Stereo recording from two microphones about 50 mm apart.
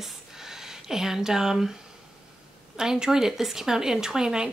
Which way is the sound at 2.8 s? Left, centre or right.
Centre.